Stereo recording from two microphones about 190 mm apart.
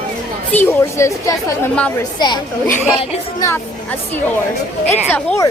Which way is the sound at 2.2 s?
25° left (ahead or behind).